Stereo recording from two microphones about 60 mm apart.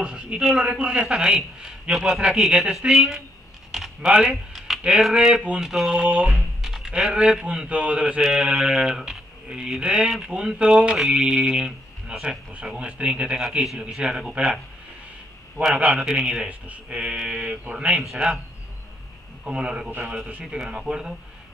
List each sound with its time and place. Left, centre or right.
0.0 s speech: centre
3.7 s a sound: centre
5.1 s speech: centre
6.3 s a sound: centre
7.0 s speech: centre
15.6 s speech: centre
16.4 s speech: right
19.4 s speech: centre